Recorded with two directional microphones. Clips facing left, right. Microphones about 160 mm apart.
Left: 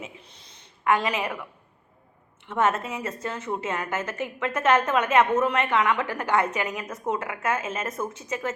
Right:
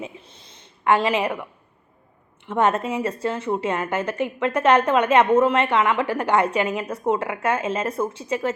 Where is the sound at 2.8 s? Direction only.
30° right (ahead or behind).